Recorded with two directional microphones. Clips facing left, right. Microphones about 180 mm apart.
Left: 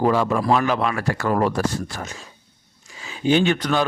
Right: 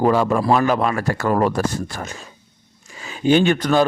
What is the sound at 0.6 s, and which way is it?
Speech, 40° right (ahead or behind).